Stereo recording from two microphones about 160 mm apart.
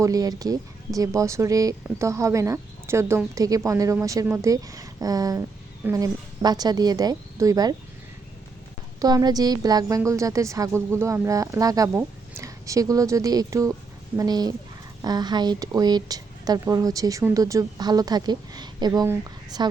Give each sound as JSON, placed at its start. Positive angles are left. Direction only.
{"t": 0.0, "sound": "a woman's voice", "side_deg": -25}
{"t": 9.0, "sound": "a woman's voice", "side_deg": -25}